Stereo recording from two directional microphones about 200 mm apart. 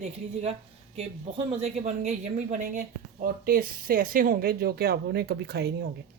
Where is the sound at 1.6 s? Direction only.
35° right (ahead or behind).